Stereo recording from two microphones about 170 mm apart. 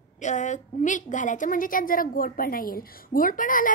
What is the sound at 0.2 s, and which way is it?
A woman's voice, 45° left (ahead or behind).